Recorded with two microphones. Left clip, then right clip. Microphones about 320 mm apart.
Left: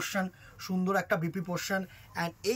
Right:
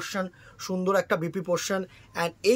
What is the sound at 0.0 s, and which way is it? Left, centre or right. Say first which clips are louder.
Speech: right 2 dB; centre.